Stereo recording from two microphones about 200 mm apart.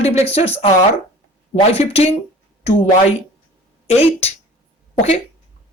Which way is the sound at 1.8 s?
30° left (ahead or behind).